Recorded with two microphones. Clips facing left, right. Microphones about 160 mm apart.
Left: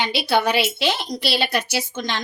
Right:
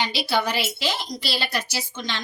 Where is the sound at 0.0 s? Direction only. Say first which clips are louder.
Left 4 dB; 60° left (ahead or behind).